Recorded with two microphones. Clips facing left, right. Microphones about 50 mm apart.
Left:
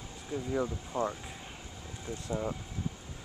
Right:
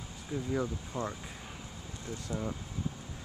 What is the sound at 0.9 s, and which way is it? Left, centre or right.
Speech, left.